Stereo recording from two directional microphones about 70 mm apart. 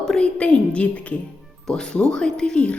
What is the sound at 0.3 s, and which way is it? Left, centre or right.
Speech, centre.